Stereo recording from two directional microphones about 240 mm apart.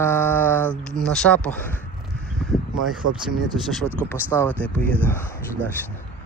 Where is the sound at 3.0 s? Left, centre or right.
Right.